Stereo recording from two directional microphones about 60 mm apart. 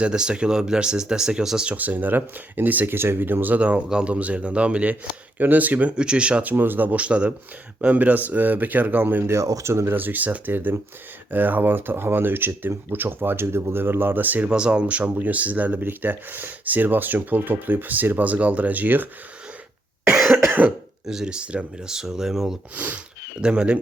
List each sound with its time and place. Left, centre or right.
0.0 s speech: centre
1.7 s speech: right
6.5 s speech: right
9.2 s speech: right
9.6 s speech: right
9.9 s speech: right
14.5 s speech: centre
20.1 s cough: centre
20.3 s cough: right
21.1 s speech: centre
22.7 s speech: right
23.4 s speech: centre